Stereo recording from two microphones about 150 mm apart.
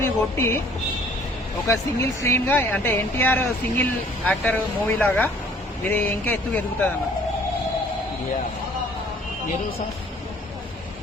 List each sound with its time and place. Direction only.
0.0 s speech: 15° left (ahead or behind)
1.6 s speech: 20° left (ahead or behind)